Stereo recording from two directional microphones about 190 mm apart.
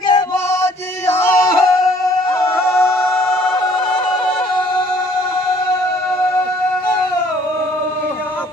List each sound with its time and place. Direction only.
0.1 s chant: 20° left (ahead or behind)
2.4 s music: 15° left (ahead or behind)